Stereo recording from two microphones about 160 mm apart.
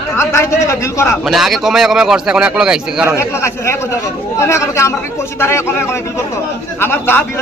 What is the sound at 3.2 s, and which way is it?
A man's voice, 15° left (ahead or behind).